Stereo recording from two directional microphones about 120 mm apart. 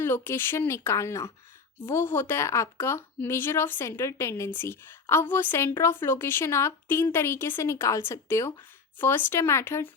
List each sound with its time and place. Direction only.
0.0 s a woman's voice: 20° left (ahead or behind)